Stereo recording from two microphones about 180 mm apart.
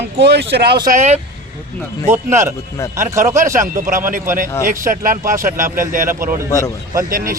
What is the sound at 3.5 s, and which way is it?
Speech, 45° right (ahead or behind).